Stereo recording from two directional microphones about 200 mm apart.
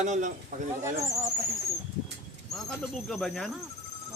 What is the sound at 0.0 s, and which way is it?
Speech, 35° right (ahead or behind).